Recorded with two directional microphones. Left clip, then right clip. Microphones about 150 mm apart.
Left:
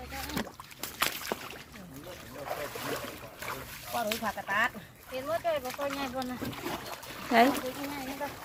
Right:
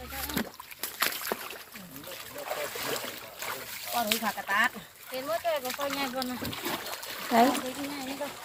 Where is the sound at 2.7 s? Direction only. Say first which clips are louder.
Right 2 dB; 20° left (ahead or behind).